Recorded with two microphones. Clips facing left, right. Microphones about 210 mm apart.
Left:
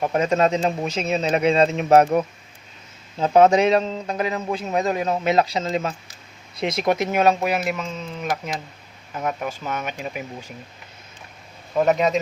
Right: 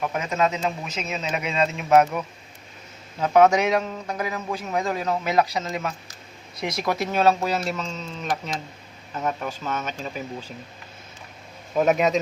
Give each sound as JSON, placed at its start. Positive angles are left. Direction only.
{"t": 0.0, "sound": "speech", "side_deg": 35}
{"t": 3.2, "sound": "a man's voice", "side_deg": 30}
{"t": 11.8, "sound": "speech", "side_deg": -5}